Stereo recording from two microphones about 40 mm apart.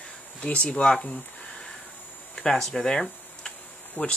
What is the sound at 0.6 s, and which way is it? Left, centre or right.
Speech, left.